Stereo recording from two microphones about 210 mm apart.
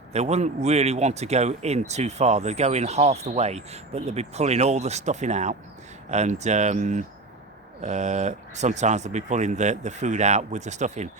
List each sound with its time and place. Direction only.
0.1 s speech: 30° right (ahead or behind)